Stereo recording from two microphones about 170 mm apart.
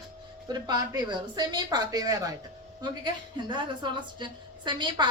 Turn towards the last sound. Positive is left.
turn(degrees=-25)  # may be behind; listen again after turning